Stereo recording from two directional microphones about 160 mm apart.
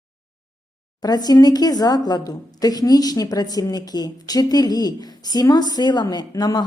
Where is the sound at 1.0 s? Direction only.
25° left (ahead or behind).